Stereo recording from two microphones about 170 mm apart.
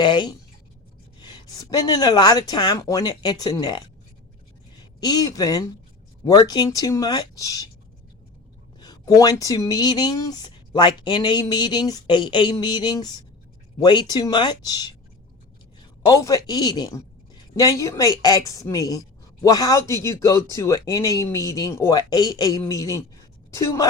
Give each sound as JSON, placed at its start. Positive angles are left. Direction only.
{"t": 0.0, "sound": "a woman's voice", "side_deg": 25}
{"t": 4.9, "sound": "a woman's voice", "side_deg": 20}
{"t": 8.8, "sound": "a woman's voice", "side_deg": 20}
{"t": 16.0, "sound": "a woman's voice", "side_deg": 20}